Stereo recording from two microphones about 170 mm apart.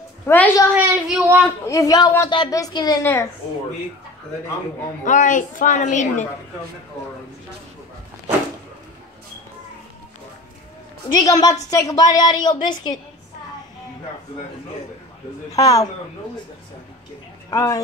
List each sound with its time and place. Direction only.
0.3 s a woman's voice: 15° left (ahead or behind)
0.7 s speech: 10° right (ahead or behind)
1.7 s a woman's voice: 20° left (ahead or behind)
5.0 s a woman's voice: 50° left (ahead or behind)
11.1 s a woman's voice: 25° left (ahead or behind)
15.5 s a woman's voice: 20° left (ahead or behind)
17.5 s a woman's voice: 20° left (ahead or behind)